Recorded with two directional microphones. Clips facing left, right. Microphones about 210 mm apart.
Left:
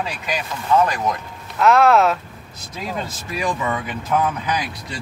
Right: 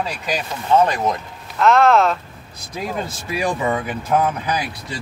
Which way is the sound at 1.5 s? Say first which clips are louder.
Even; centre (ahead or behind).